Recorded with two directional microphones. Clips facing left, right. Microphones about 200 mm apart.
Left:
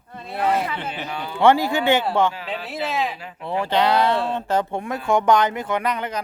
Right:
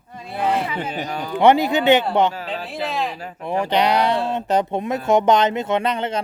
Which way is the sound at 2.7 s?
Centre (ahead or behind).